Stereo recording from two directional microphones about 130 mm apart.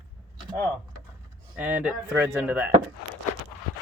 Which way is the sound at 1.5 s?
10° right (ahead or behind).